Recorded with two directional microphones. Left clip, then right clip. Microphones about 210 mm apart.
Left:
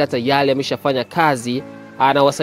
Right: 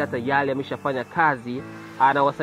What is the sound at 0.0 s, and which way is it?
Speech, 45° left (ahead or behind).